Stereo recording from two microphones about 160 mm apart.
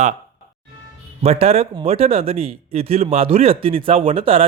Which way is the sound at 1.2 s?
40° right (ahead or behind).